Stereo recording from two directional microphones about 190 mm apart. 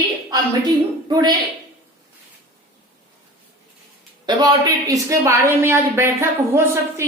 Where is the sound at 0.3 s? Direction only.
20° right (ahead or behind).